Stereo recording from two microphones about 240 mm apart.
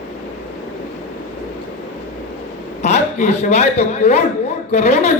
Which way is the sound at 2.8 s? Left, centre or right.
Left.